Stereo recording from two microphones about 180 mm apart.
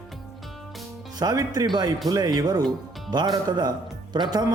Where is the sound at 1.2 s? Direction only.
20° right (ahead or behind).